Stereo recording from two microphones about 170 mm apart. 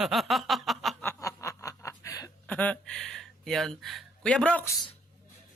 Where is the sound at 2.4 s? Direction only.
10° left (ahead or behind).